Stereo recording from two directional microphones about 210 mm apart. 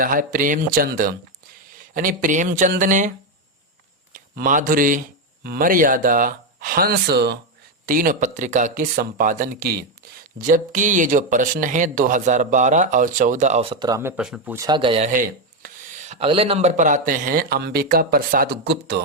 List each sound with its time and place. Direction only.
0.0 s speech: 40° right (ahead or behind)
4.1 s speech: 40° right (ahead or behind); by 14.1 s 15° right (ahead or behind)
14.2 s speech: 5° right (ahead or behind); by 15.1 s 25° right (ahead or behind)
15.1 s speech: 40° right (ahead or behind)